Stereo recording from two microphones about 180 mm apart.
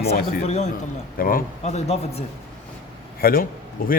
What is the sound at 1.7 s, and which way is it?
Speech, 35° left (ahead or behind).